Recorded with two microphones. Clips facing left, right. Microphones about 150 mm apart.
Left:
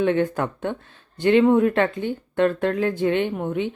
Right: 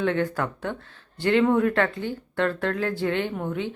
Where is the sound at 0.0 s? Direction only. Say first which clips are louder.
Left 4 dB; 20° left (ahead or behind).